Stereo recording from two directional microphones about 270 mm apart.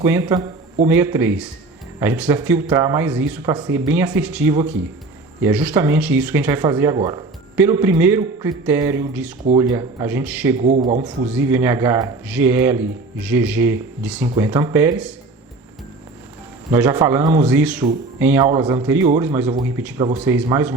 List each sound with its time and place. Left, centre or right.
0.0 s speech: centre
10.7 s speech: right
11.3 s speech: centre
16.7 s speech: centre